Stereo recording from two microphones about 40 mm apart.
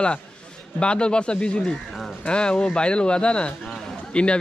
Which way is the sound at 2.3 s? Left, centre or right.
Left.